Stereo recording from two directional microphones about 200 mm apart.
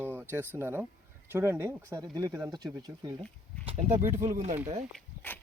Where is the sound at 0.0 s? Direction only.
10° right (ahead or behind).